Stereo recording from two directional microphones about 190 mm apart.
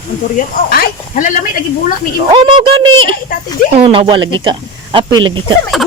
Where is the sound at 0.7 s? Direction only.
50° left (ahead or behind).